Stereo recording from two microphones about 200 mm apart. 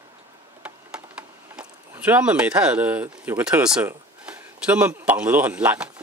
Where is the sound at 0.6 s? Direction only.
5° right (ahead or behind).